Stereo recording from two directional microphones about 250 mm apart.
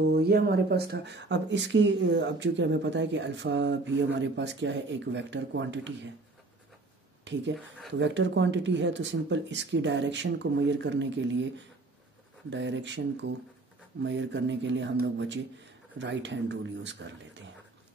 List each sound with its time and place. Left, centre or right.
0.1 s speech: right
7.3 s speech: right